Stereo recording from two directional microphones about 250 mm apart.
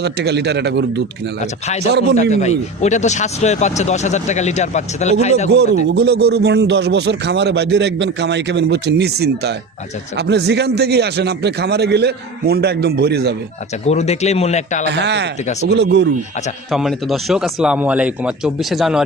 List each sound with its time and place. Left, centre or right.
0.0 s speech: right
1.4 s speech: left
1.8 s a man's voice: right
2.3 s speech: left
5.5 s a man's voice: right
13.8 s speech: left
14.9 s speech: right
16.7 s speech: centre